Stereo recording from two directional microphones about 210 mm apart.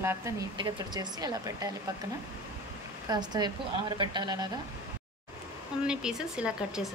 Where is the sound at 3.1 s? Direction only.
20° right (ahead or behind).